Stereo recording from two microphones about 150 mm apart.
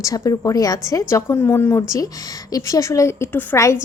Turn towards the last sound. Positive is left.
turn(degrees=20)  # may be behind; listen again after turning